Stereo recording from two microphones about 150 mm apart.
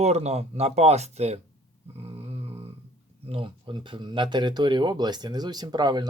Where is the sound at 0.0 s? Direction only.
45° right (ahead or behind).